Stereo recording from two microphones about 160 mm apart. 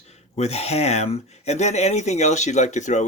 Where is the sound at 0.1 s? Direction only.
45° left (ahead or behind).